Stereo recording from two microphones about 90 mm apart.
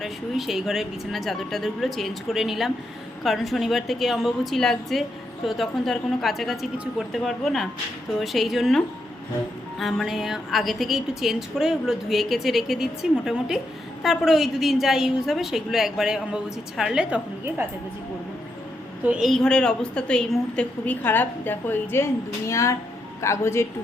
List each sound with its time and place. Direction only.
0.0 s a woman's voice: centre (ahead or behind)
19.2 s a woman's voice: 5° left (ahead or behind); by 23.6 s 30° left (ahead or behind)